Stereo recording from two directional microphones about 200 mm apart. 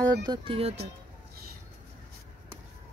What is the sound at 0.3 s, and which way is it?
Speech, 30° right (ahead or behind).